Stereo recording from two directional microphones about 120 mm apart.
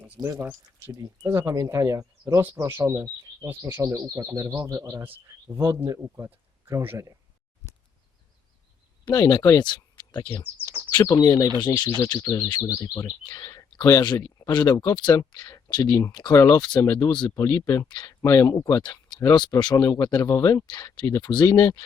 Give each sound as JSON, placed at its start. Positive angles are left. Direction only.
{"t": 0.2, "sound": "speech", "side_deg": -25}
{"t": 9.0, "sound": "speech", "side_deg": 30}
{"t": 14.5, "sound": "speech", "side_deg": 40}
{"t": 19.7, "sound": "speech", "side_deg": 25}